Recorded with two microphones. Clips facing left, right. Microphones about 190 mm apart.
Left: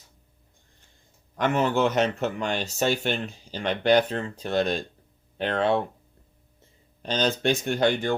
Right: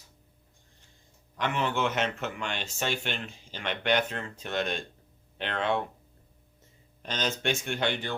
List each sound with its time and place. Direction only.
1.4 s speech: 45° left (ahead or behind)
7.0 s speech: 35° left (ahead or behind)